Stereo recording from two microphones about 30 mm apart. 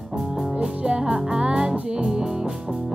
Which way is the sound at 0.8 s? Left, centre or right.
Right.